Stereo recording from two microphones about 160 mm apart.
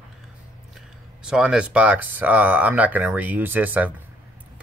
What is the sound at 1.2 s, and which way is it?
Speech, 5° right (ahead or behind).